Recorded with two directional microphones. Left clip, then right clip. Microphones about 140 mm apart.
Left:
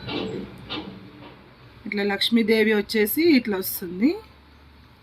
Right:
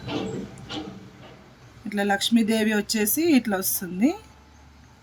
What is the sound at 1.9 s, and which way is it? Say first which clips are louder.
Speech: even; 45° right (ahead or behind).